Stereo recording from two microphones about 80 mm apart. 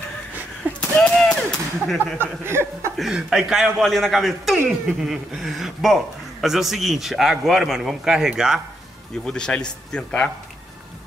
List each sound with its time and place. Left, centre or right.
0.7 s gunshot: centre
2.1 s speech: right
3.2 s a man's voice: centre
9.2 s a man's voice: centre